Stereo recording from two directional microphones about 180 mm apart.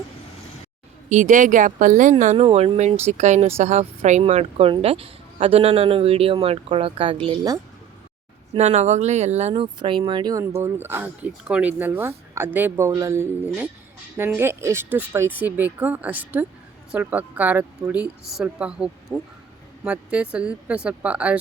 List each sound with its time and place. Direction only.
1.1 s speech: 45° right (ahead or behind); by 7.6 s 25° right (ahead or behind)
8.5 s a woman's voice: 40° right (ahead or behind); by 21.3 s 10° right (ahead or behind)